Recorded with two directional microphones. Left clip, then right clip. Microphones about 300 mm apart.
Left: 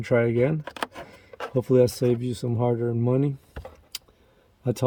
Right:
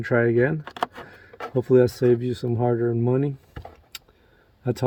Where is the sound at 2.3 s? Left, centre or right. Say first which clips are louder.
Right 2 dB; left.